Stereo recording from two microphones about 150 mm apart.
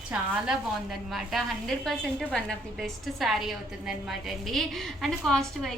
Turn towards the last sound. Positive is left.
turn(degrees=0)  # may be behind; listen again after turning